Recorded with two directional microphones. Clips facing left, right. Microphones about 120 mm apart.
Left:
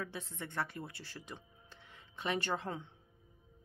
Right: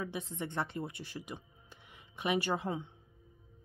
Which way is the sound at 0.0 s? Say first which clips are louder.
Right 4 dB; 15° right (ahead or behind).